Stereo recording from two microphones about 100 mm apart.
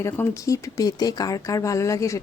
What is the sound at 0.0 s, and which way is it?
Speech, 30° left (ahead or behind).